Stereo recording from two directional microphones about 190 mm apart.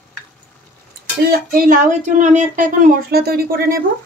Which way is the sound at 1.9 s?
40° right (ahead or behind).